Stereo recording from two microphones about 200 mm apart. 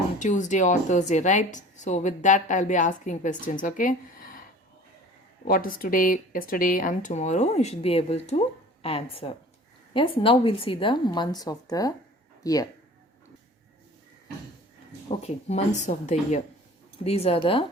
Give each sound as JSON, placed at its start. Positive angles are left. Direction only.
{"t": 0.2, "sound": "a woman's voice", "side_deg": 40}
{"t": 5.5, "sound": "a woman's voice", "side_deg": 45}
{"t": 15.1, "sound": "a woman's voice", "side_deg": 30}